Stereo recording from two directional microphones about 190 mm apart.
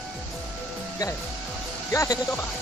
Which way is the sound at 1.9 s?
15° left (ahead or behind).